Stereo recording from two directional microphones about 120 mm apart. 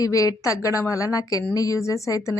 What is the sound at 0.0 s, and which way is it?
A woman's voice, 30° left (ahead or behind).